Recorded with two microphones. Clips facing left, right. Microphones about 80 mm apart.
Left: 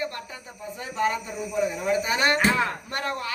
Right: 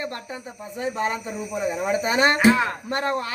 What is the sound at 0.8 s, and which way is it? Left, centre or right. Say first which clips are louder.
Speech: right 1 dB; right.